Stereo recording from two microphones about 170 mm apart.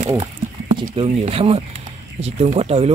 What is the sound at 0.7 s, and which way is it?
Speech, 30° right (ahead or behind).